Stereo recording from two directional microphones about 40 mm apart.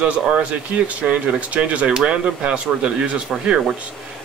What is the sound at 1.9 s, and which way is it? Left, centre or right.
A man's voice, right.